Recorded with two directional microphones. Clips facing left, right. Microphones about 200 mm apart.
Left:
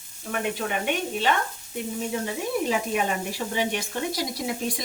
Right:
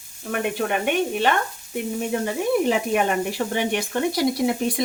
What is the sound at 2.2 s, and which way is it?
Speech, 60° right (ahead or behind).